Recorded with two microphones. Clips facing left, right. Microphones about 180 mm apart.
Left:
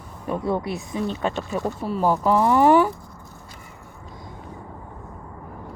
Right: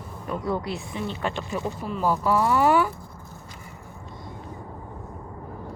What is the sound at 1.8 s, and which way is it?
Speech, 30° left (ahead or behind).